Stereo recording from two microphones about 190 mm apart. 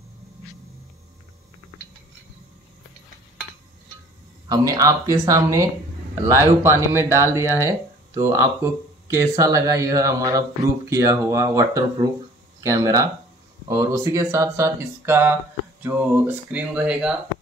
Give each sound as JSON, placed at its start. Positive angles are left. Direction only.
{"t": 4.5, "sound": "speech", "side_deg": -20}